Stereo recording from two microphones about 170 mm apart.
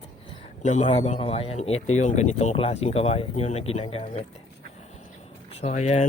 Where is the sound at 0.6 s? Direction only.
45° left (ahead or behind).